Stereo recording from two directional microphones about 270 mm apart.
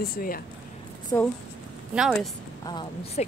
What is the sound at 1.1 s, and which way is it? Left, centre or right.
Speech, centre.